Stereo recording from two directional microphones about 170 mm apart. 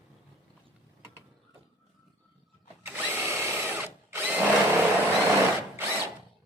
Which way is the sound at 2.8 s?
10° right (ahead or behind).